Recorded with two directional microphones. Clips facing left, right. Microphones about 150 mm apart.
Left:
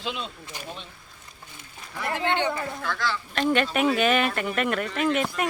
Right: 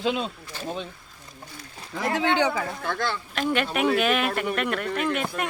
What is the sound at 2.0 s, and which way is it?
Speech, 90° right.